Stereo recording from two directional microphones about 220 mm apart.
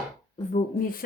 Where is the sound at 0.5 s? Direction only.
40° left (ahead or behind).